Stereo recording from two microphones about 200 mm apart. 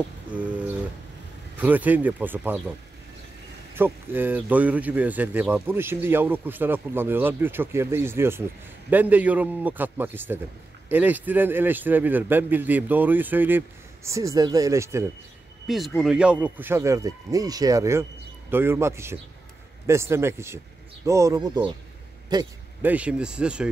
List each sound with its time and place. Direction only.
0.3 s a sound: 5° right (ahead or behind)
1.6 s speech: 10° right (ahead or behind)
3.7 s speech: 10° right (ahead or behind)
15.6 s a man's voice: centre (ahead or behind); by 22.5 s 20° right (ahead or behind)
22.8 s speech: 5° right (ahead or behind)